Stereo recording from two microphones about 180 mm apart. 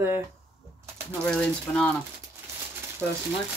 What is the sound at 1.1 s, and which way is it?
Speech, 5° left (ahead or behind).